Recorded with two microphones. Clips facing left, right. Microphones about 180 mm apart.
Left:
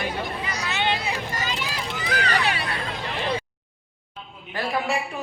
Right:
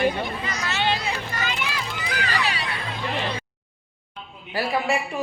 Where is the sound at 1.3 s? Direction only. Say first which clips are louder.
Right 1 dB; 35° left (ahead or behind).